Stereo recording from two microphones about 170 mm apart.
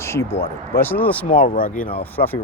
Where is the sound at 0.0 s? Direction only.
15° left (ahead or behind).